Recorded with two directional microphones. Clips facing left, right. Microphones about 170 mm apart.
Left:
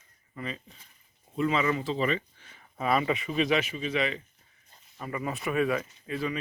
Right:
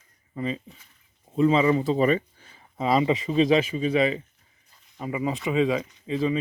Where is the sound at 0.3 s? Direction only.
30° right (ahead or behind).